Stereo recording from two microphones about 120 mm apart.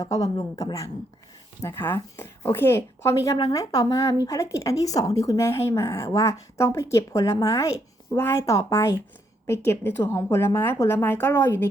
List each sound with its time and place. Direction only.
0.0 s a woman's voice: 30° left (ahead or behind)